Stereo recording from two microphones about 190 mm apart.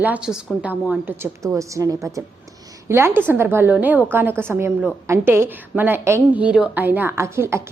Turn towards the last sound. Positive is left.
turn(degrees=-15)  # may be behind; listen again after turning